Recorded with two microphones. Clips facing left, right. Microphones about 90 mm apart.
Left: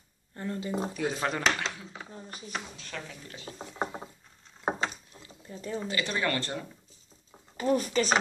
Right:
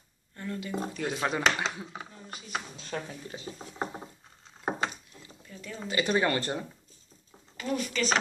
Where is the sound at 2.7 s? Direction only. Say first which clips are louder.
Right 4 dB; 25° right (ahead or behind).